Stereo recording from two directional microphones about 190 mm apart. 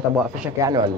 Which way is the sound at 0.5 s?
20° right (ahead or behind).